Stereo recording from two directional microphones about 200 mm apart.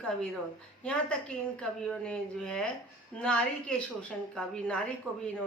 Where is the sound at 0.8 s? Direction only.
5° left (ahead or behind).